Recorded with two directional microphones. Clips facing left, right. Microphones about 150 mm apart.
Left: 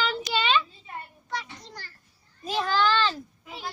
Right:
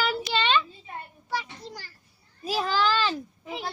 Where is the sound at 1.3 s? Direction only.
5° right (ahead or behind).